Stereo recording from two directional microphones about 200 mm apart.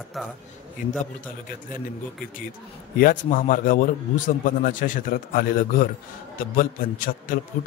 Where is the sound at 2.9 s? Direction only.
45° left (ahead or behind).